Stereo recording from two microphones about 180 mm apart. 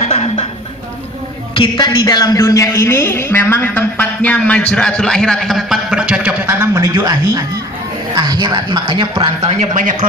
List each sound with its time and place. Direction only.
1.5 s a man's voice: 25° left (ahead or behind); by 9.9 s 40° right (ahead or behind)